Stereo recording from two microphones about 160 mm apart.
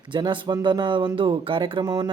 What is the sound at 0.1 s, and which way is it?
Speech, 30° right (ahead or behind).